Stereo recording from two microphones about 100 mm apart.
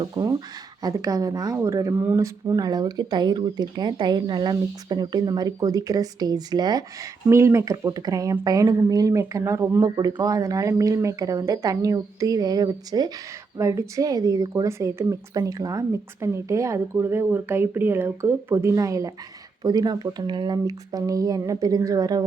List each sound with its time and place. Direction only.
0.0 s speech: 40° right (ahead or behind)
2.0 s speech: 20° right (ahead or behind)
2.6 s speech: 40° right (ahead or behind)
7.3 s speech: 25° right (ahead or behind)
9.9 s speech: 45° right (ahead or behind)
10.2 s speech: 35° right (ahead or behind)